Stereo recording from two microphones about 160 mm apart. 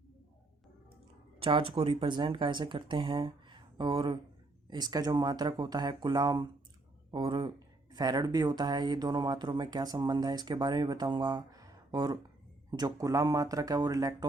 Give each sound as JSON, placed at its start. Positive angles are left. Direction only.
{"t": 1.4, "sound": "speech", "side_deg": -35}